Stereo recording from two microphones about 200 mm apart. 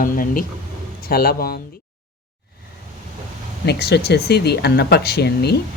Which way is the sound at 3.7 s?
55° left (ahead or behind).